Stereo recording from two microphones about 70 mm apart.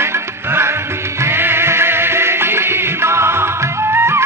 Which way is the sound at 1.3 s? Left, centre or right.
Right.